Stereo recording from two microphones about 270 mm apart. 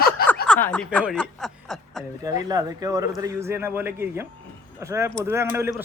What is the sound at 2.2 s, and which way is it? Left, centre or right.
Speech, centre.